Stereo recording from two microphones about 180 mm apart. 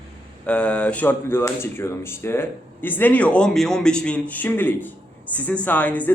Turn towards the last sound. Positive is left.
turn(degrees=10)  # may be behind; listen again after turning